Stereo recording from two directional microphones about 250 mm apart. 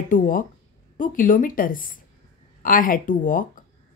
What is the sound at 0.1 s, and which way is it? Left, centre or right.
A woman's voice, left.